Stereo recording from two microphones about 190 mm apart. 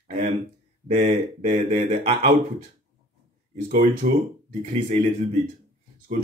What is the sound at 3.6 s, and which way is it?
A man's voice, 40° right (ahead or behind).